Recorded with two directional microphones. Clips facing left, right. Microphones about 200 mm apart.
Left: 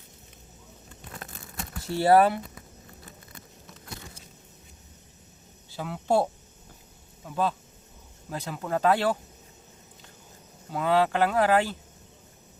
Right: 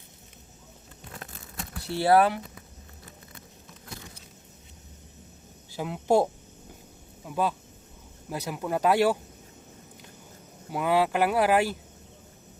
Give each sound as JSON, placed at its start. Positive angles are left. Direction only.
{"t": 2.0, "sound": "speech", "side_deg": 0}
{"t": 5.7, "sound": "speech", "side_deg": -15}
{"t": 7.3, "sound": "speech", "side_deg": -10}
{"t": 10.7, "sound": "speech", "side_deg": -10}